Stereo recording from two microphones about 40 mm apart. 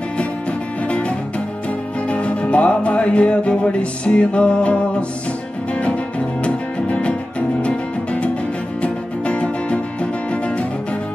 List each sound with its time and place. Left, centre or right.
0.8 s music: left
5.8 s music: left